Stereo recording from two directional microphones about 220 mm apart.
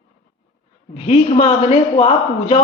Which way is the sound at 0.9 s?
30° left (ahead or behind).